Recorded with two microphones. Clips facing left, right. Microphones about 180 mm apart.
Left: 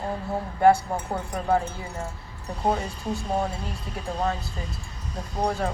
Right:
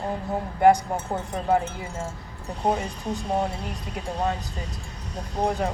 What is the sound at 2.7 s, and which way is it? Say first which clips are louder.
Speech: even; 15° right (ahead or behind).